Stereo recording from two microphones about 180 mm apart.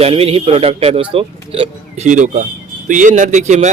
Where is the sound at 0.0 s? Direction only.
35° right (ahead or behind).